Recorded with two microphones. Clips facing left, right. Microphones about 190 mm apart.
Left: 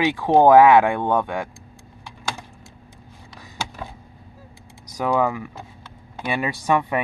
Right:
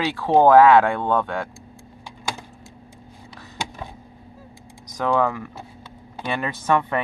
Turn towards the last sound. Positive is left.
turn(degrees=15)  # may be behind; listen again after turning